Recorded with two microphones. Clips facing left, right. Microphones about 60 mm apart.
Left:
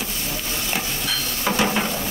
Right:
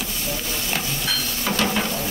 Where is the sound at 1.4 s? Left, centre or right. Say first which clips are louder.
Left 2 dB; centre.